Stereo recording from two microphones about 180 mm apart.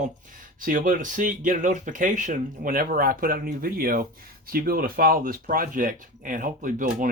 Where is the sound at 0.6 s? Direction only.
50° right (ahead or behind).